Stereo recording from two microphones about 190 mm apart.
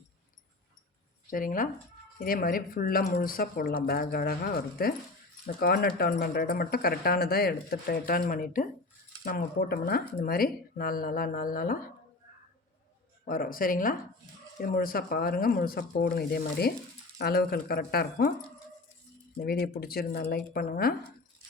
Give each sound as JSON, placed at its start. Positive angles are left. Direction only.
{"t": 1.3, "sound": "speech", "side_deg": 45}
{"t": 13.2, "sound": "speech", "side_deg": 50}
{"t": 19.4, "sound": "speech", "side_deg": 55}